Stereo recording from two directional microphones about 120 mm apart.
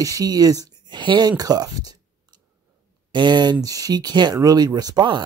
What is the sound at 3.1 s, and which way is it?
Speech, 40° right (ahead or behind).